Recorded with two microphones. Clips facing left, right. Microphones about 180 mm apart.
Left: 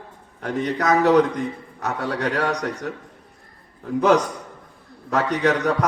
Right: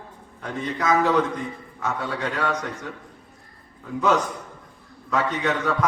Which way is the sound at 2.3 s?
40° left (ahead or behind).